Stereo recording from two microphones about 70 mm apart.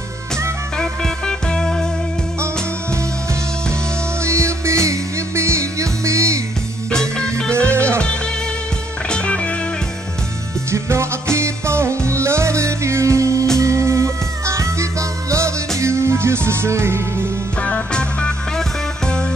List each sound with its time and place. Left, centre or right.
0.7 s music: centre
4.2 s music: right
6.9 s music: centre
7.6 s music: right
9.1 s music: centre
10.7 s music: right
17.6 s music: centre